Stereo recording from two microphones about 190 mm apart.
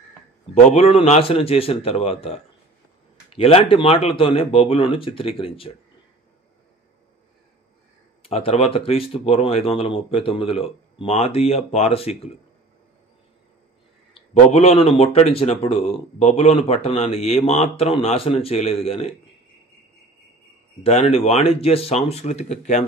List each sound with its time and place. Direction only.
0.7 s speech: 30° left (ahead or behind)
8.2 s speech: 30° left (ahead or behind)
14.1 s speech: 35° left (ahead or behind)
20.8 s speech: 30° left (ahead or behind)